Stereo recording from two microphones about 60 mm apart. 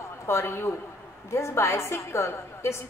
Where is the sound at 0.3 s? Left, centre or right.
Left.